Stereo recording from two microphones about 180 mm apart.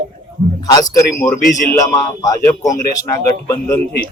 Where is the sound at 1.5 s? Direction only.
45° left (ahead or behind).